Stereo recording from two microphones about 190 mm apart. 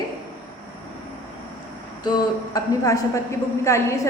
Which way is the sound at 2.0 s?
20° left (ahead or behind).